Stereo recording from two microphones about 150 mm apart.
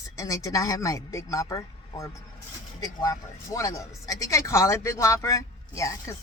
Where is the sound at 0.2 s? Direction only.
20° left (ahead or behind).